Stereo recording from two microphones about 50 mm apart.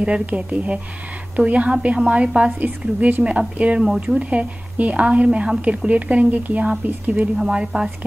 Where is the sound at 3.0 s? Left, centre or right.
Right.